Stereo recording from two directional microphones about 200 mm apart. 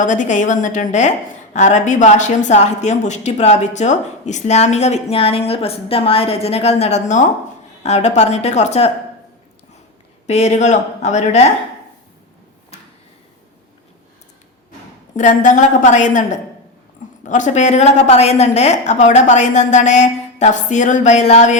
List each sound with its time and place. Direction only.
0.0 s a woman's voice: 40° left (ahead or behind)
10.2 s a woman's voice: 35° left (ahead or behind)
15.1 s a woman's voice: 40° left (ahead or behind)